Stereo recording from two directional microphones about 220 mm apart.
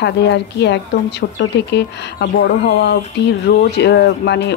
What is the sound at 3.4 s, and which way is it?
A woman's voice, 50° left (ahead or behind).